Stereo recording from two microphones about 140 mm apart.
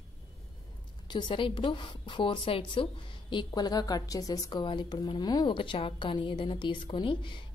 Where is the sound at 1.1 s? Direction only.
35° left (ahead or behind).